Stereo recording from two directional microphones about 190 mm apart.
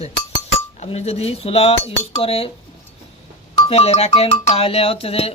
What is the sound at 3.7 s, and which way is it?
Speech, 35° left (ahead or behind).